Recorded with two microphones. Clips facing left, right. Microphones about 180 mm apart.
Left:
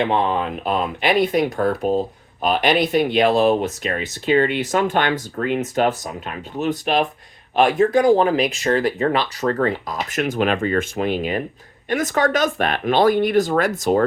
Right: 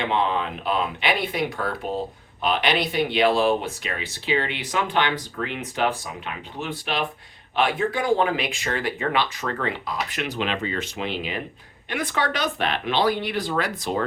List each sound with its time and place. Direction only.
0.1 s speech: 45° left (ahead or behind)